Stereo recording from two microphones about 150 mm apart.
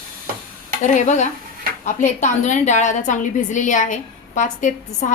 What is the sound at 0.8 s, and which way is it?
A woman's voice, 50° left (ahead or behind).